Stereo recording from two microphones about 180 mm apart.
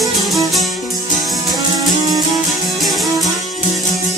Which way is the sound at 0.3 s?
Centre (ahead or behind).